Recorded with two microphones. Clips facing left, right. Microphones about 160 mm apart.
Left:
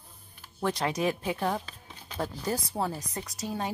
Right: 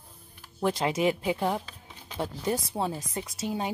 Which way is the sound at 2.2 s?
25° right (ahead or behind).